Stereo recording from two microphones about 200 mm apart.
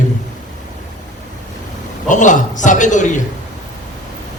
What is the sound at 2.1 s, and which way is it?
Speech, 40° left (ahead or behind).